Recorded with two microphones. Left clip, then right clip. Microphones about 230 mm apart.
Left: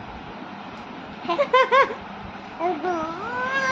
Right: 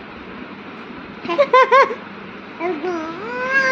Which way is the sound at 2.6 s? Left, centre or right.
Centre.